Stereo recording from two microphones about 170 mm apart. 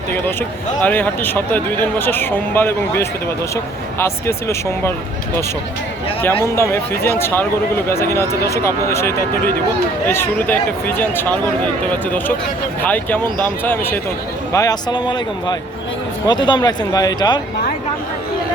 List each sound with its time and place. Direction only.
0.8 s speech: 10° left (ahead or behind)
6.2 s speech: 15° left (ahead or behind)
12.8 s speech: 10° left (ahead or behind)